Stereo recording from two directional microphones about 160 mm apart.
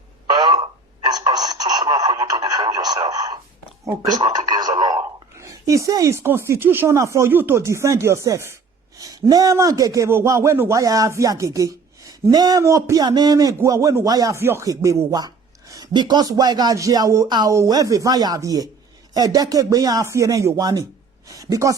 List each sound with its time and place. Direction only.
0.3 s radio: 25° right (ahead or behind)
3.8 s a man's voice: 25° right (ahead or behind)